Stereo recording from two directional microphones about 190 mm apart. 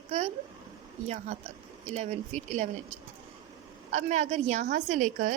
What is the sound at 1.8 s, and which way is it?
Speech, 35° right (ahead or behind).